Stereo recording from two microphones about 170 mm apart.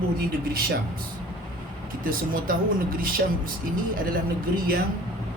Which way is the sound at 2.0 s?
55° right (ahead or behind).